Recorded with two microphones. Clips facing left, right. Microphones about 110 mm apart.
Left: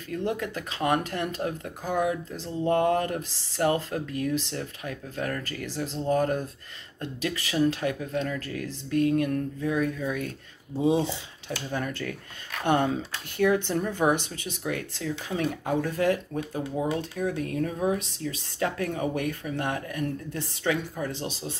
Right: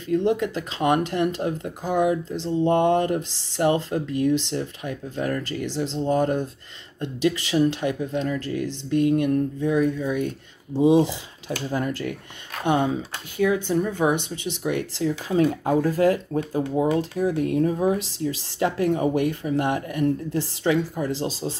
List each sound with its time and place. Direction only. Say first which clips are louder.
0.2 s speech: right 7 dB; 30° right (ahead or behind)
1.9 s speech: right 5 dB; centre (ahead or behind)
2.4 s speech: right 4 dB; 30° right (ahead or behind)
9.7 s speech: right 4 dB; 5° right (ahead or behind)
10.7 s speech: right 7 dB; 90° right
11.7 s speech: right 5 dB; 30° right (ahead or behind)
12.6 s speech: right 2 dB; 15° right (ahead or behind)
14.7 s speech: right 6 dB; 25° right (ahead or behind)